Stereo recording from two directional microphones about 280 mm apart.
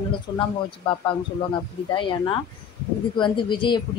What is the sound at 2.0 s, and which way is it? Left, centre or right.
A woman's voice, centre.